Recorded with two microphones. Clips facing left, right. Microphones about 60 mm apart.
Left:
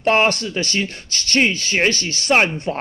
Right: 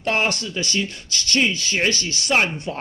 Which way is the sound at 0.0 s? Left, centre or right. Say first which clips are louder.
Left 6 dB; left.